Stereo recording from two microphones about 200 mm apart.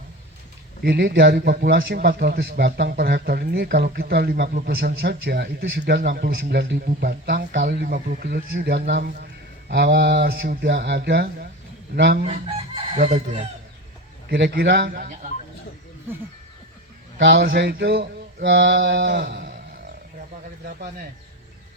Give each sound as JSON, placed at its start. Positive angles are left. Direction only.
{"t": 0.9, "sound": "a man's voice", "side_deg": -55}
{"t": 12.2, "sound": "chicken", "side_deg": -30}
{"t": 14.3, "sound": "a man's voice", "side_deg": -55}
{"t": 17.2, "sound": "speech", "side_deg": -65}